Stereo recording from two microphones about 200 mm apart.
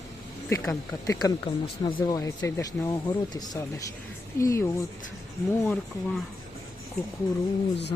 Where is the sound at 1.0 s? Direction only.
20° left (ahead or behind).